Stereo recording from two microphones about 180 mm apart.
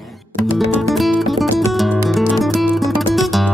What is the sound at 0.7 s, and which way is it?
Music, centre (ahead or behind).